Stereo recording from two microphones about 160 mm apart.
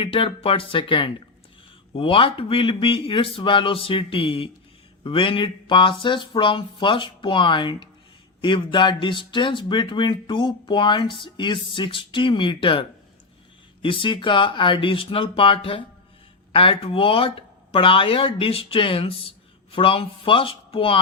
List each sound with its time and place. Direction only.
0.0 s speech: 35° left (ahead or behind)
13.8 s speech: 30° left (ahead or behind)